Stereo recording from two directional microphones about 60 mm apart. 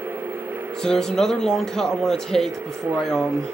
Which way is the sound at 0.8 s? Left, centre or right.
Centre.